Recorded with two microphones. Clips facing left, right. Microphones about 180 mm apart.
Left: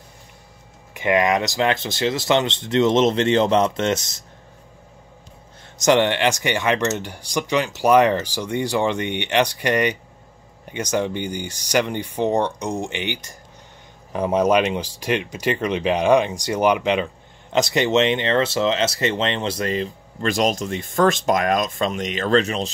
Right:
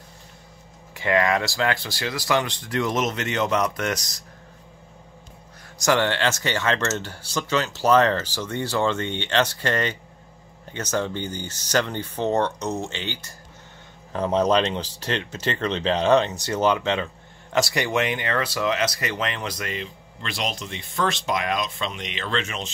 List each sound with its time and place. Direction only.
0.9 s speech: 20° left (ahead or behind)
5.8 s speech: 20° left (ahead or behind); by 22.7 s 35° left (ahead or behind)